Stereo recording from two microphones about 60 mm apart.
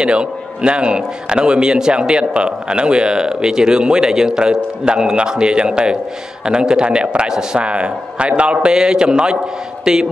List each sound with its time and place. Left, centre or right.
0.0 s a man's voice: centre